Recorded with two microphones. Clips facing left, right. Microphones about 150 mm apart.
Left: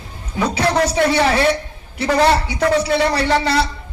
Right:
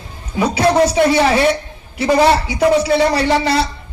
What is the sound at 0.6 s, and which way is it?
Speech, 20° right (ahead or behind).